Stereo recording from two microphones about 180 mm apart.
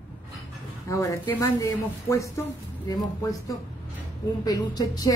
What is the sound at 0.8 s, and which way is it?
Speech, 15° left (ahead or behind).